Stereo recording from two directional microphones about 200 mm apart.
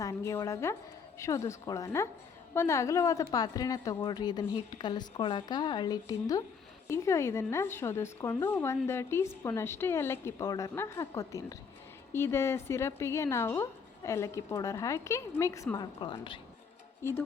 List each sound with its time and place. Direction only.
0.0 s a woman's voice: 15° left (ahead or behind)
17.0 s speech: 10° left (ahead or behind)